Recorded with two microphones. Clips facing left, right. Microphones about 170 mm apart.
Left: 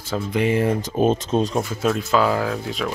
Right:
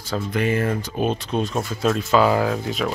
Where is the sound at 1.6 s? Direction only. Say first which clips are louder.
Even; centre (ahead or behind).